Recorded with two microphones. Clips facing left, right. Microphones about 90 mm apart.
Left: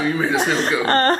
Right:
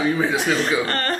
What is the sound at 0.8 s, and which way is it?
Speech, 40° left (ahead or behind).